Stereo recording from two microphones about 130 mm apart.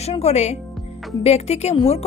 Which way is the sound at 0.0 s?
55° left (ahead or behind).